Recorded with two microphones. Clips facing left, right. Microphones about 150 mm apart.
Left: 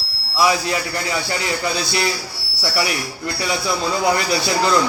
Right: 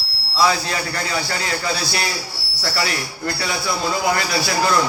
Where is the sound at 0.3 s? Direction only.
15° left (ahead or behind).